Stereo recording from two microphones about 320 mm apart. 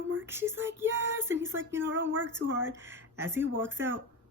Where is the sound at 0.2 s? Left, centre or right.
Centre.